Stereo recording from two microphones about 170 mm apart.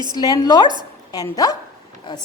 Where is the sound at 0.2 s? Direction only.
25° left (ahead or behind).